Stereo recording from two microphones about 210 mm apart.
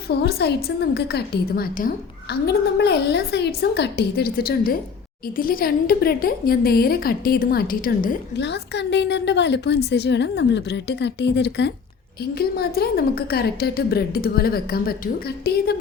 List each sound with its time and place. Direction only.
0.2 s a woman's voice: 50° left (ahead or behind)